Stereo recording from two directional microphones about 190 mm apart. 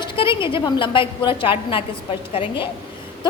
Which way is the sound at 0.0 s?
25° left (ahead or behind).